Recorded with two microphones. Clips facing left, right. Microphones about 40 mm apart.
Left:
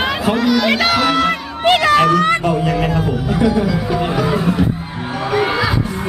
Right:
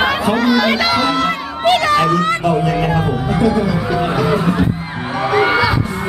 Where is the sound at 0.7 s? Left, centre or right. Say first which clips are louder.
Left 1 dB; centre.